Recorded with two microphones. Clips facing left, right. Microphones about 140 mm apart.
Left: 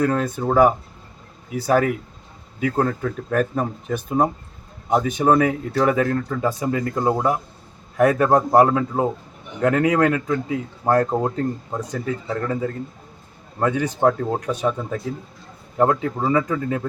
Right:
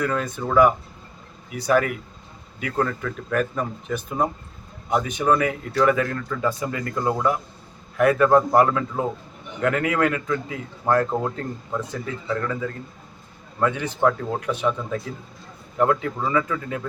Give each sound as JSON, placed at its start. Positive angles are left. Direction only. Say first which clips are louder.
{"t": 0.0, "sound": "a man's voice", "louder": "left 4 dB", "side_deg": 35}